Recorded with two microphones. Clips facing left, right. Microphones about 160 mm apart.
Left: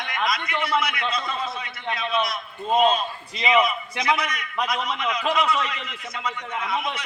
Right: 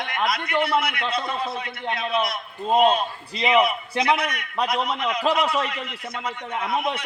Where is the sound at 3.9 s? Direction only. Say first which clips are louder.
Right 4 dB; 30° right (ahead or behind).